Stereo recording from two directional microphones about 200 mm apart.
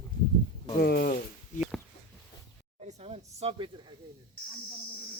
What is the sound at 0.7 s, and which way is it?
Speech, 50° left (ahead or behind).